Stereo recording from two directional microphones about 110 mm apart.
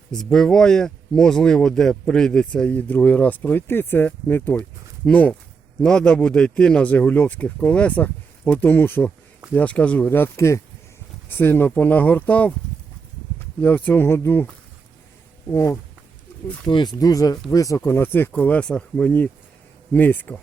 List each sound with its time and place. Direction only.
0.1 s speech: 5° left (ahead or behind)
10.1 s speech: 20° left (ahead or behind)
13.6 s speech: 15° left (ahead or behind)
15.4 s speech: 25° left (ahead or behind)
16.6 s speech: 45° left (ahead or behind)
17.0 s speech: 35° left (ahead or behind); by 20.4 s 15° left (ahead or behind)